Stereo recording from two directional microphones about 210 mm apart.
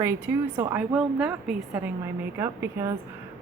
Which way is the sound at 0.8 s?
5° right (ahead or behind).